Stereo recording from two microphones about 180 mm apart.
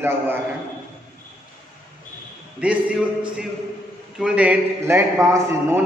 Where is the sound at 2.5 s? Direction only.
5° right (ahead or behind).